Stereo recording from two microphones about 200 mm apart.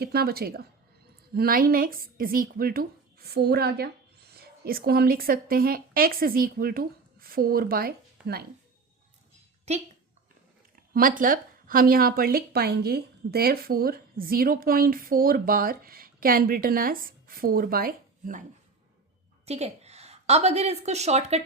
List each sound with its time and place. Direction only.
0.0 s a woman's voice: 50° right (ahead or behind)
10.9 s speech: 45° right (ahead or behind)
19.5 s a woman's voice: 30° right (ahead or behind)